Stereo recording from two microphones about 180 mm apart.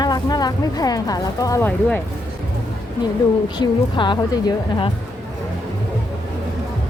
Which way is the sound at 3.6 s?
25° left (ahead or behind).